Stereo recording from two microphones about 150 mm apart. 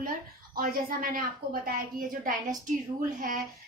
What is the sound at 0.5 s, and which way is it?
Speech, 75° right (ahead or behind).